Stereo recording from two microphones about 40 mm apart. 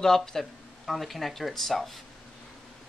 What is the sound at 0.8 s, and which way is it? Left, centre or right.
Speech, centre.